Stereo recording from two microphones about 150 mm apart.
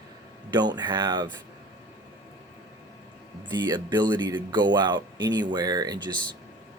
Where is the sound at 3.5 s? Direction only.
30° right (ahead or behind).